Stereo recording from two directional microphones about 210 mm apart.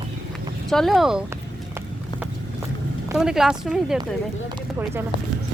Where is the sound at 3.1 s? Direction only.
5° right (ahead or behind).